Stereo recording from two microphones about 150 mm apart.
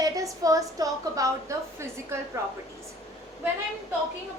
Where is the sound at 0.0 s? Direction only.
25° right (ahead or behind).